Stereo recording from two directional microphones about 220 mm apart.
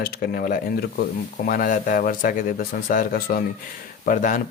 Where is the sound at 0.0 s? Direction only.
45° left (ahead or behind).